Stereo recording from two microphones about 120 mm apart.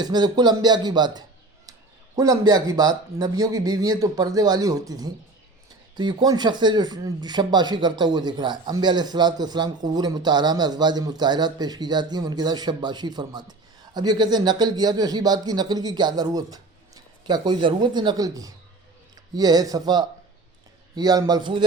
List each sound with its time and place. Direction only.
0.0 s speech: 35° right (ahead or behind)